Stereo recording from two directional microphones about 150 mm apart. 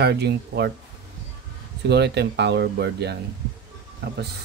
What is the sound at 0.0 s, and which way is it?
Speech, 90° right.